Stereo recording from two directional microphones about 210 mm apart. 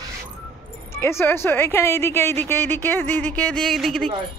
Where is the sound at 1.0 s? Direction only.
10° left (ahead or behind).